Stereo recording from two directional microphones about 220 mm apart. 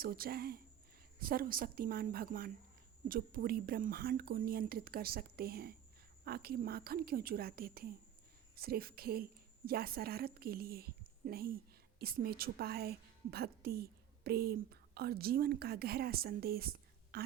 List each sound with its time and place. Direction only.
0.0 s a woman's voice: 40° right (ahead or behind)